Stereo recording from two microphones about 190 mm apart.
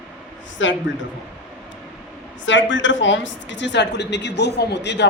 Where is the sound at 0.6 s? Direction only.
80° left.